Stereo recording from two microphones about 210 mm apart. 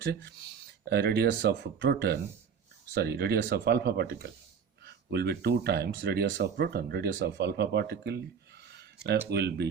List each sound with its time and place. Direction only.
0.0 s speech: 55° right (ahead or behind)
8.6 s a sound: 55° right (ahead or behind)
9.3 s speech: 50° right (ahead or behind)